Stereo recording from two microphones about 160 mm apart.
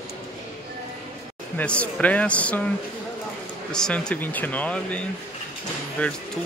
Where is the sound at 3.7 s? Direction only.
5° left (ahead or behind).